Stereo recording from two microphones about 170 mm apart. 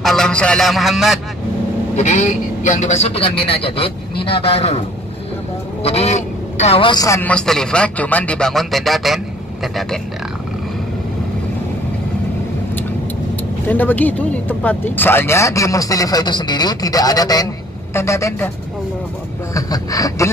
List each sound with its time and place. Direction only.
0.0 s a man's voice: centre (ahead or behind)
2.0 s a man's voice: 45° left (ahead or behind)
5.9 s a man's voice: 40° left (ahead or behind); by 7.2 s 25° left (ahead or behind)
7.2 s a man's voice: 5° left (ahead or behind)
13.7 s a woman's voice: 10° left (ahead or behind)
19.5 s a woman's voice: 20° left (ahead or behind)